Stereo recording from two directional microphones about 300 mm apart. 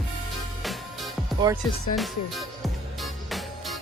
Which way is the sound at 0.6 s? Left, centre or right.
Centre.